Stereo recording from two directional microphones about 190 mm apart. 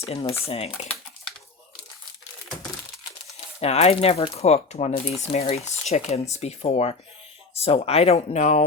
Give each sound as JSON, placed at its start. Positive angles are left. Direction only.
{"t": 0.0, "sound": "speech", "side_deg": 30}
{"t": 3.6, "sound": "speech", "side_deg": 35}